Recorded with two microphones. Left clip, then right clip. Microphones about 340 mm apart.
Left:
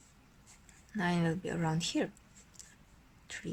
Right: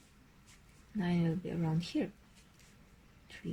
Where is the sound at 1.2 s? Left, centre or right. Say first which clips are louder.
Left 3 dB; left.